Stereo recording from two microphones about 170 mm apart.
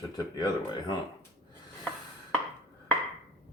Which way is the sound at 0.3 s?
25° left (ahead or behind).